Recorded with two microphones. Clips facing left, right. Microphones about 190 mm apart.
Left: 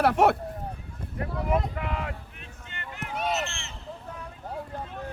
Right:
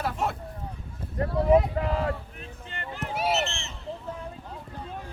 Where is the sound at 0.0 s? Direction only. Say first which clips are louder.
Left 9 dB; 70° left (ahead or behind).